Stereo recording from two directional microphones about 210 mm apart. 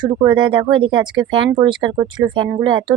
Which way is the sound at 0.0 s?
20° right (ahead or behind).